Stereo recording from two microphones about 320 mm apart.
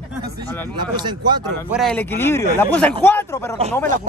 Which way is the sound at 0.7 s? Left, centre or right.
Centre.